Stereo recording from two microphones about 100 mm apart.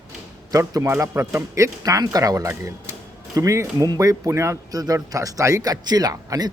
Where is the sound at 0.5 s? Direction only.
40° right (ahead or behind).